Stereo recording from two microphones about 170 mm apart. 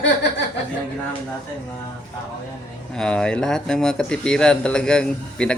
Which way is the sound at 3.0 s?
5° left (ahead or behind).